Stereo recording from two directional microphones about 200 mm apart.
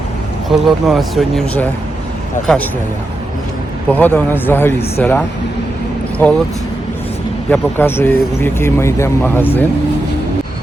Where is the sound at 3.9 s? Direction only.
10° left (ahead or behind).